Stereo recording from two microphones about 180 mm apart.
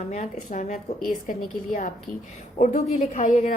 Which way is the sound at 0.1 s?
45° left (ahead or behind).